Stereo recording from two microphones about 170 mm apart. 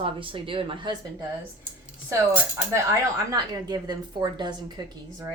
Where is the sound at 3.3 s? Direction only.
25° right (ahead or behind).